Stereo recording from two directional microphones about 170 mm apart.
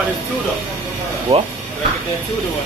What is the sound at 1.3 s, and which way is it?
Speech, 35° right (ahead or behind).